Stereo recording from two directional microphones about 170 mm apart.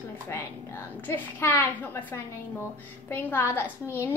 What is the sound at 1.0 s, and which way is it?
A woman's voice, 15° left (ahead or behind).